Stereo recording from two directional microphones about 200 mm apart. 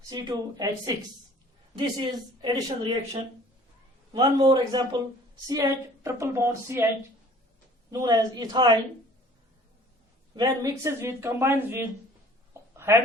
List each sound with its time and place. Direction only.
0.1 s a woman's voice: 20° right (ahead or behind)
2.4 s a woman's voice: 25° right (ahead or behind)
7.9 s a woman's voice: 20° right (ahead or behind)
10.3 s speech: 20° right (ahead or behind)
12.7 s a sound: 15° right (ahead or behind)